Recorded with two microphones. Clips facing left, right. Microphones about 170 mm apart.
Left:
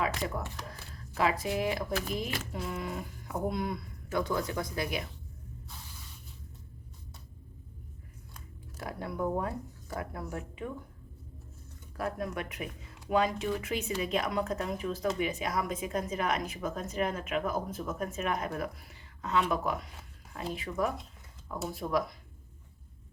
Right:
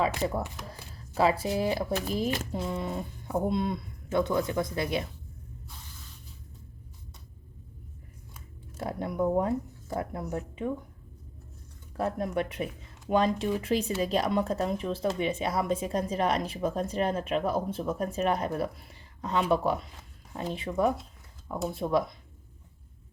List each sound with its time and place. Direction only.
1.1 s speech: 30° right (ahead or behind)
2.5 s speech: 25° right (ahead or behind)
8.8 s speech: 25° right (ahead or behind)
11.9 s speech: 25° right (ahead or behind)